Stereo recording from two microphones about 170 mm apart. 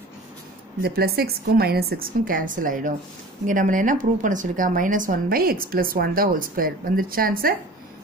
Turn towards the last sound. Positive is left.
turn(degrees=-60)  # may be behind; listen again after turning